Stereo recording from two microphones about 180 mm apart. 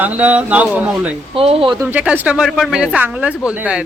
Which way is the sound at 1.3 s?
30° right (ahead or behind).